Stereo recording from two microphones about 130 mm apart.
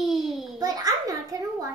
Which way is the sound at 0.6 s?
30° right (ahead or behind).